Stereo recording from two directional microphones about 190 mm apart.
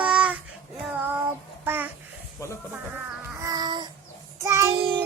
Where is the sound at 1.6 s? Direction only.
10° right (ahead or behind).